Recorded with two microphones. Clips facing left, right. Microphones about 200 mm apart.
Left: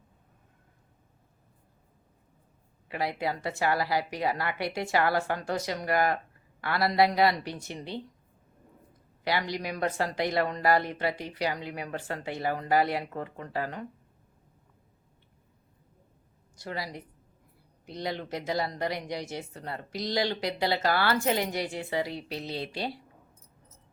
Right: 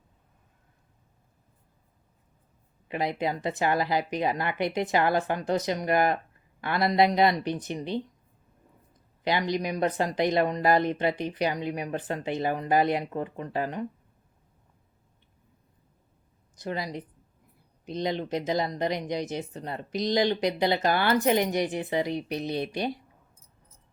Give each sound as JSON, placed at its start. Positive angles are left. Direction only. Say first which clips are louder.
{"t": 2.9, "sound": "speech", "louder": "right 2 dB", "side_deg": -20}
{"t": 9.5, "sound": "speech", "louder": "right 4 dB", "side_deg": -20}
{"t": 16.6, "sound": "speech", "louder": "right 4 dB", "side_deg": -20}